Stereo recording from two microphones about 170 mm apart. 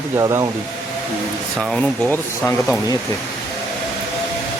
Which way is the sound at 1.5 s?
5° left (ahead or behind).